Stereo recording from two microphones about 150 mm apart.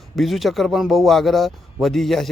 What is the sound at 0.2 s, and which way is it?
Speech, centre (ahead or behind).